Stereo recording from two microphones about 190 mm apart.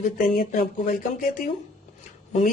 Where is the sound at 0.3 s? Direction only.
45° left (ahead or behind).